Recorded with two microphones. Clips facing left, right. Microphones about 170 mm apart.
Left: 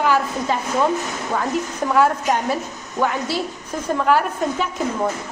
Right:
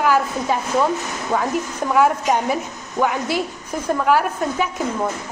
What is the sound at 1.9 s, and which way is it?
Speech, 10° right (ahead or behind).